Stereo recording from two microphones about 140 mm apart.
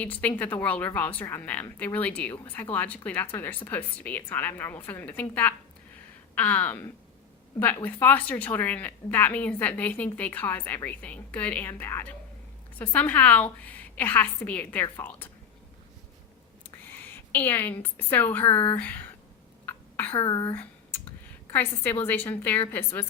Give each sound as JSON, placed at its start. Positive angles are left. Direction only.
{"t": 0.0, "sound": "a woman's voice", "side_deg": 10}
{"t": 17.3, "sound": "a woman's voice", "side_deg": 15}
{"t": 19.6, "sound": "cough", "side_deg": 15}
{"t": 20.1, "sound": "a woman's voice", "side_deg": 30}
{"t": 21.5, "sound": "a woman's voice", "side_deg": 10}